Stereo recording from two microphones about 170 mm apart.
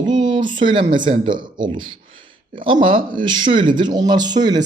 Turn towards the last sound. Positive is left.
turn(degrees=-25)  # may be behind; listen again after turning